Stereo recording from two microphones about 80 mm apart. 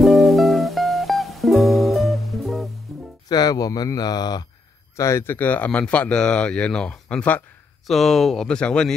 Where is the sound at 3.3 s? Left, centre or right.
Left.